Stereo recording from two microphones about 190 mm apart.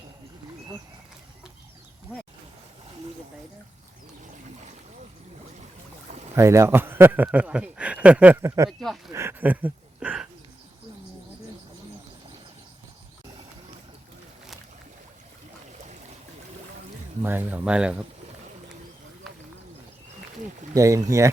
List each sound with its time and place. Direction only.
6.3 s a man's voice: 15° right (ahead or behind)
8.8 s speech: centre (ahead or behind)
9.1 s speech: 10° right (ahead or behind)
17.2 s a man's voice: 10° right (ahead or behind)
20.7 s a man's voice: 15° right (ahead or behind)